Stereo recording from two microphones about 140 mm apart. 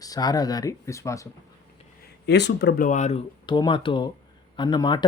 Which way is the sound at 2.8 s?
60° left (ahead or behind).